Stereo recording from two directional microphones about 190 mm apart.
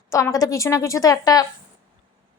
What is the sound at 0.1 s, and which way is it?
Speech, 15° left (ahead or behind).